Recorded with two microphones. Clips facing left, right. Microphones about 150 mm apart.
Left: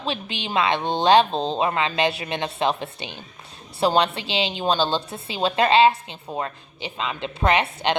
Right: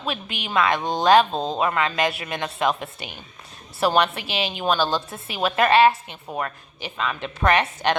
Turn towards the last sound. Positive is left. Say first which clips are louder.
# even
turn(degrees=20)  # may be behind; listen again after turning